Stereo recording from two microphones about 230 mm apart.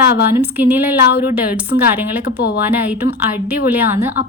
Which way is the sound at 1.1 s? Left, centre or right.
Left.